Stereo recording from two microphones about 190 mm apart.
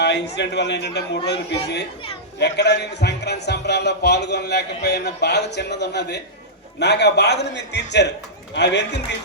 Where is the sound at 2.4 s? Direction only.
65° left (ahead or behind).